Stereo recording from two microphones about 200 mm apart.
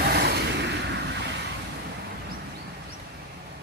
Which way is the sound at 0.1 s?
55° right (ahead or behind).